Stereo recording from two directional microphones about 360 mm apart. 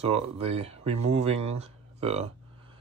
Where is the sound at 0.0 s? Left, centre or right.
Centre.